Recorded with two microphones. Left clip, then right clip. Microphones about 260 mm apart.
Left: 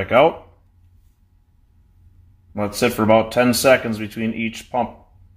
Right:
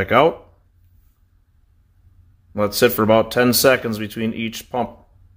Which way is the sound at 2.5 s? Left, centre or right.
Right.